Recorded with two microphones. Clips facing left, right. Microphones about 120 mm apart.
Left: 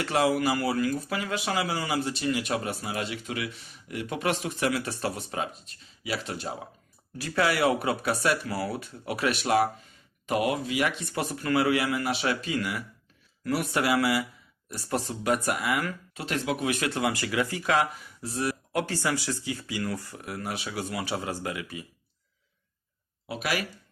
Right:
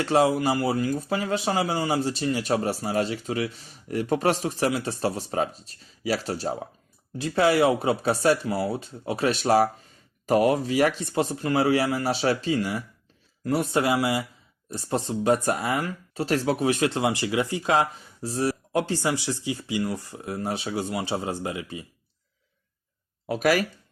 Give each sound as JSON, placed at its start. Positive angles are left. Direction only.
{"t": 0.0, "sound": "speech", "side_deg": -30}
{"t": 7.2, "sound": "speech", "side_deg": -25}
{"t": 23.2, "sound": "speech", "side_deg": -45}